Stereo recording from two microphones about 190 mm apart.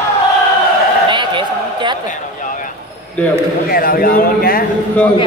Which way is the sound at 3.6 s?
50° left (ahead or behind).